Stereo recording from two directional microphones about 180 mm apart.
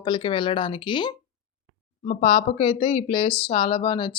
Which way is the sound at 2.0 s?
35° left (ahead or behind).